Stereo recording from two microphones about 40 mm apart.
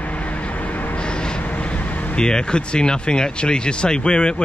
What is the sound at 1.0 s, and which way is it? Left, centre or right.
Train, left.